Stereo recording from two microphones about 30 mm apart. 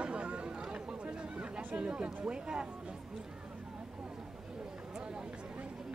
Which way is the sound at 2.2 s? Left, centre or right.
Right.